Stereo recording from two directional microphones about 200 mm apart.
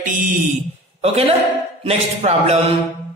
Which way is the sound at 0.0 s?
40° right (ahead or behind).